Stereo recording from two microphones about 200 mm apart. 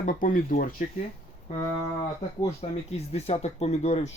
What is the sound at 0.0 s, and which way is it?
Speech, 40° left (ahead or behind).